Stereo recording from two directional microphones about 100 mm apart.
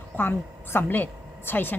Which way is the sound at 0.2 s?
20° left (ahead or behind).